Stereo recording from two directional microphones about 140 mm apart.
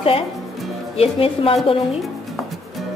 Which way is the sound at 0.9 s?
45° left (ahead or behind).